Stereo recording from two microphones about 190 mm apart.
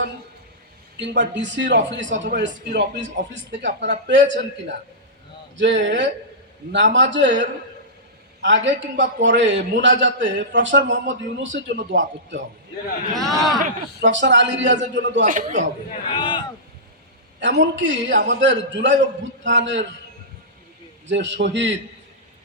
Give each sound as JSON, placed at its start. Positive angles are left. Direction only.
{"t": 0.9, "sound": "a man's voice", "side_deg": -70}
{"t": 13.1, "sound": "speech", "side_deg": 0}
{"t": 14.0, "sound": "a man's voice", "side_deg": -70}
{"t": 15.2, "sound": "a man's voice", "side_deg": -40}
{"t": 16.1, "sound": "speech", "side_deg": 25}
{"t": 17.4, "sound": "a man's voice", "side_deg": -70}
{"t": 21.1, "sound": "a man's voice", "side_deg": -70}